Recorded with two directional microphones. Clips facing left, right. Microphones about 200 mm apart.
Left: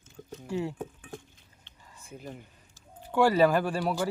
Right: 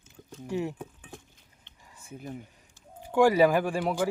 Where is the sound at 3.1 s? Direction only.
10° right (ahead or behind).